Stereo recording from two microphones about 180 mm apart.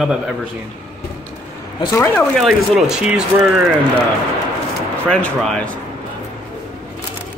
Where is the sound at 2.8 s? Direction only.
5° right (ahead or behind).